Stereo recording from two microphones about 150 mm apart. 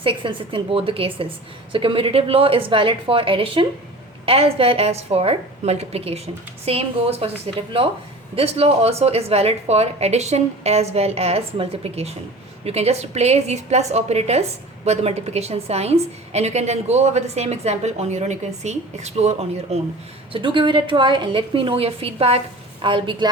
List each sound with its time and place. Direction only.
0.0 s a woman's voice: 35° right (ahead or behind)
20.3 s a woman's voice: 35° right (ahead or behind)